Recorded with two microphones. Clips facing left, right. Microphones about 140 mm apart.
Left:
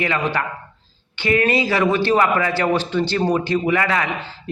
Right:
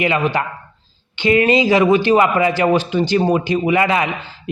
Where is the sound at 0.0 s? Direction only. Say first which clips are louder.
Right 4 dB; 15° right (ahead or behind).